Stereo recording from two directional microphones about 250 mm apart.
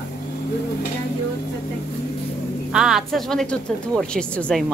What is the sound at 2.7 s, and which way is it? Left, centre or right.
Speech, centre.